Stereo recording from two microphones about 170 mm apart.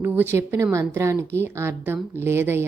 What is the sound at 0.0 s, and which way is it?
Speech, 10° right (ahead or behind).